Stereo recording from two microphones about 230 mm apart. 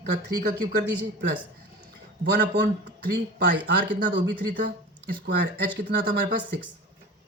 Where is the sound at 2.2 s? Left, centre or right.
Right.